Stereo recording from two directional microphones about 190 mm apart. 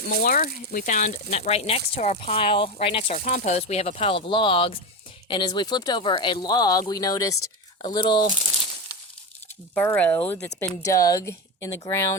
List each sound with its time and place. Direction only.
0.0 s speech: 50° left (ahead or behind); by 8.3 s 25° left (ahead or behind)
9.7 s speech: 10° left (ahead or behind)